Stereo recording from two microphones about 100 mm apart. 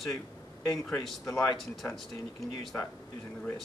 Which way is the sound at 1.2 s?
35° left (ahead or behind).